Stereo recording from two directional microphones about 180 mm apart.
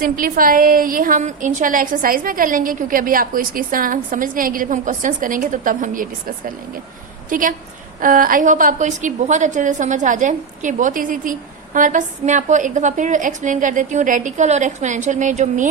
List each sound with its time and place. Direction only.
0.0 s a woman's voice: 50° right (ahead or behind)